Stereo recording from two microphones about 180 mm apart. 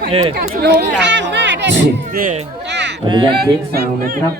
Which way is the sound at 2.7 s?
75° right (ahead or behind).